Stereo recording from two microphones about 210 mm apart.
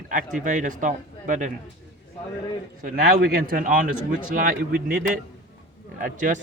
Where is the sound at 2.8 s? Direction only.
45° right (ahead or behind).